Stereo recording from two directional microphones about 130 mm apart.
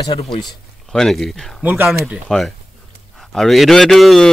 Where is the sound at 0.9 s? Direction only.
5° left (ahead or behind).